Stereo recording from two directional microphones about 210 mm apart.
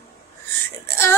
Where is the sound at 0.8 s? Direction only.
15° left (ahead or behind).